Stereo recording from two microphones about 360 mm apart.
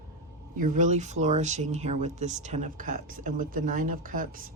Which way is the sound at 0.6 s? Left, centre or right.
Centre.